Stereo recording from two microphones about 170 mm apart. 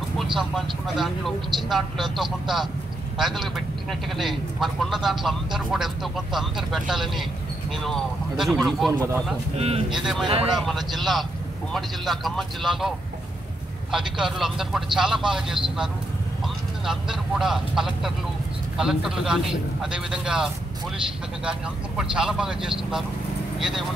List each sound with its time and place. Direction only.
0.4 s speech: centre (ahead or behind)
9.6 s speech: 35° right (ahead or behind)
10.4 s speech: centre (ahead or behind)
13.9 s speech: centre (ahead or behind)
16.8 s speech: centre (ahead or behind)